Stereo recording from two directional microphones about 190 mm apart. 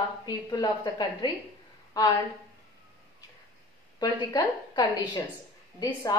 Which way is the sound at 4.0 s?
20° left (ahead or behind).